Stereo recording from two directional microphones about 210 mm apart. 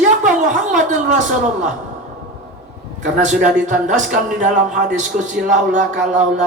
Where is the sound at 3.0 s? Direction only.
35° right (ahead or behind).